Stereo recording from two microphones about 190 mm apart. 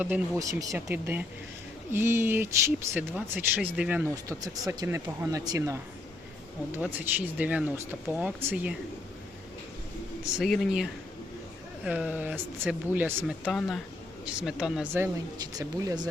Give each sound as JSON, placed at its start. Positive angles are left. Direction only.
{"t": 0.0, "sound": "speech", "side_deg": -15}
{"t": 4.1, "sound": "speech", "side_deg": -20}
{"t": 10.3, "sound": "speech", "side_deg": 0}
{"t": 11.9, "sound": "speech", "side_deg": -5}
{"t": 15.5, "sound": "speech", "side_deg": -20}